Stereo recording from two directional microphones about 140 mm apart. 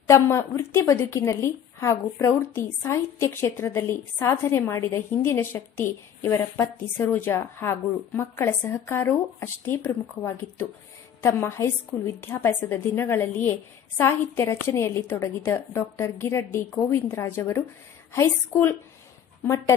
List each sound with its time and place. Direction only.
0.1 s a woman's voice: 20° left (ahead or behind)